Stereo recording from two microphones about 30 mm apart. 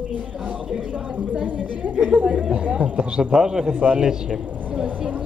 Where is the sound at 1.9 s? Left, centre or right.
Right.